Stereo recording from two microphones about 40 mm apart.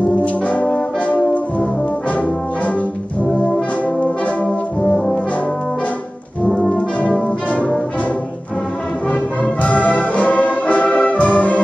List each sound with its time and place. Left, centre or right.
0.2 s brass instrument: left
3.8 s brass instrument: left
4.5 s brass instrument: centre
9.1 s music: left